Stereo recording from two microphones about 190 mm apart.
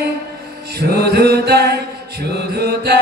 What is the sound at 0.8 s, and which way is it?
Mantra, 60° right (ahead or behind).